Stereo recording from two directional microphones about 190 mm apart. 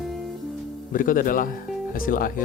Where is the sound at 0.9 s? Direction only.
45° left (ahead or behind).